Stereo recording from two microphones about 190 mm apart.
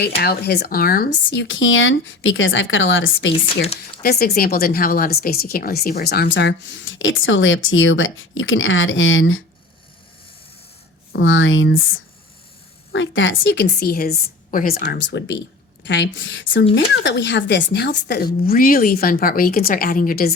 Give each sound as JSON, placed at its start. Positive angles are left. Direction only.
{"t": 0.2, "sound": "speech", "side_deg": 60}
{"t": 3.4, "sound": "speech", "side_deg": 30}
{"t": 4.0, "sound": "speech", "side_deg": 55}
{"t": 11.1, "sound": "a woman's voice", "side_deg": 90}